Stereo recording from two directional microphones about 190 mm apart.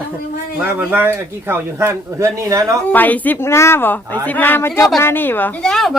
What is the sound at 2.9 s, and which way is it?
A woman's voice, 10° left (ahead or behind).